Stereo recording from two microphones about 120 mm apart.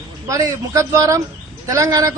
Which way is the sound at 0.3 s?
25° right (ahead or behind).